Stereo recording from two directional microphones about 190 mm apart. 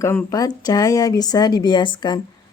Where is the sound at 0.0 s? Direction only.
15° left (ahead or behind).